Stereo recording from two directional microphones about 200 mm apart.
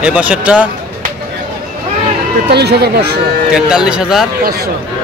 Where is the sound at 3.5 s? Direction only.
5° right (ahead or behind).